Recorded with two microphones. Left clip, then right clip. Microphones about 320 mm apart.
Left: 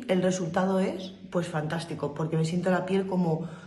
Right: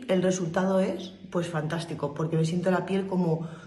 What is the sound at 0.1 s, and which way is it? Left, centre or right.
A man's voice, centre.